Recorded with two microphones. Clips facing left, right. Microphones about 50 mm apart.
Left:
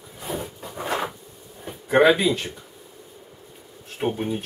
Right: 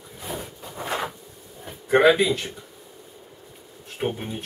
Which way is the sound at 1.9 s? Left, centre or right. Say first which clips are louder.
Even; centre.